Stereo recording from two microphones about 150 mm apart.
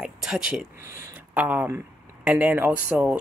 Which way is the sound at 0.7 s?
20° right (ahead or behind).